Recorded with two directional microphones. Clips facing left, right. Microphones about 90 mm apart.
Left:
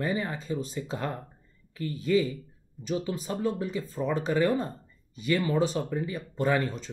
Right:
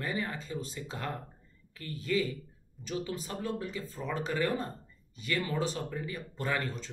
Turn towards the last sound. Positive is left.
turn(degrees=15)  # may be behind; listen again after turning